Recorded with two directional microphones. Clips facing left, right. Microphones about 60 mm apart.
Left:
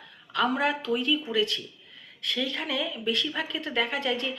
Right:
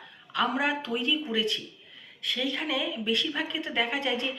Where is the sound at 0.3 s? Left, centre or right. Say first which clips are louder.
Left 1 dB; centre.